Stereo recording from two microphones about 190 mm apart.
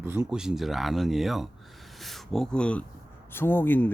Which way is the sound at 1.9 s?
Centre (ahead or behind).